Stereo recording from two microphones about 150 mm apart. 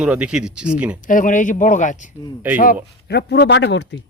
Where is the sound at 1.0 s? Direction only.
60° left (ahead or behind).